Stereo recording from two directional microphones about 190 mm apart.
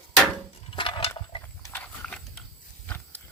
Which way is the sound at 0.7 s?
25° left (ahead or behind).